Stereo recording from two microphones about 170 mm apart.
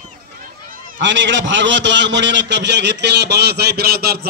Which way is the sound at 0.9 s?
90° right.